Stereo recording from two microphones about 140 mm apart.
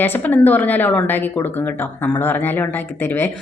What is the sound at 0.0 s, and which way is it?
A woman's voice, 15° left (ahead or behind).